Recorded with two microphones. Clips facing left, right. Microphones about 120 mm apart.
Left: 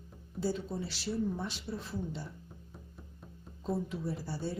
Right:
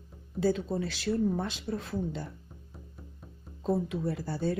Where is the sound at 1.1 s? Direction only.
55° right (ahead or behind).